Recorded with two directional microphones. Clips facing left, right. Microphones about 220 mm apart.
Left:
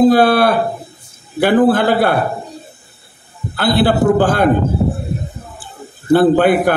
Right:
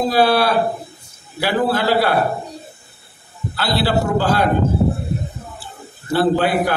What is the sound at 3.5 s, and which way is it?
Speech, 50° left (ahead or behind).